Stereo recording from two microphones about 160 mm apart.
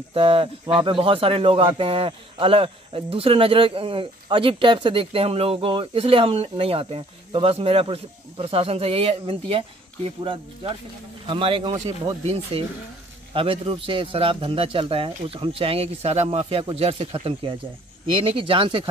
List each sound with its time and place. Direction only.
0.1 s speech: 35° right (ahead or behind)
11.7 s speech: 20° right (ahead or behind)
12.5 s speech: 35° right (ahead or behind)